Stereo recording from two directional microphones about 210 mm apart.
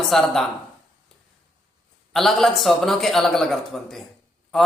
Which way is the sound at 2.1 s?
Centre (ahead or behind).